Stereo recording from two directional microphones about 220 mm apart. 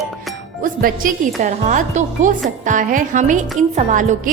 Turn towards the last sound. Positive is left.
turn(degrees=-35)  # may be behind; listen again after turning